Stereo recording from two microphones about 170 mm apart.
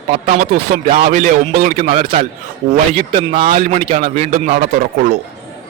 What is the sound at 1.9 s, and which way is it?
Speech, 60° right (ahead or behind).